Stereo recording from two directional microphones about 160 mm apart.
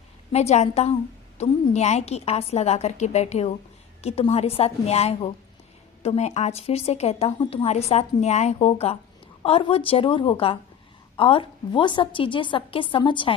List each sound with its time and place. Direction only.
0.3 s a woman's voice: 45° left (ahead or behind)